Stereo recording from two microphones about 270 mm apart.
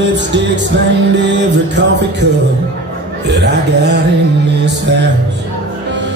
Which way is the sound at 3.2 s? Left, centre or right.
Right.